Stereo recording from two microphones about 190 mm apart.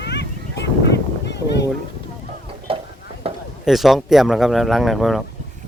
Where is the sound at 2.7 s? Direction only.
30° right (ahead or behind).